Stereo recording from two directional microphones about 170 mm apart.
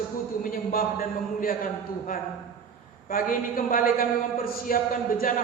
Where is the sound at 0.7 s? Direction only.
60° left (ahead or behind).